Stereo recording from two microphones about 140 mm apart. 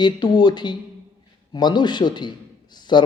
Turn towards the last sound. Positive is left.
turn(degrees=30)  # may be behind; listen again after turning